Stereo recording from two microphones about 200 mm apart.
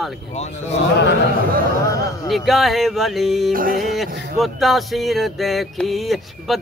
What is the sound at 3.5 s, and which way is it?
Music, 45° right (ahead or behind).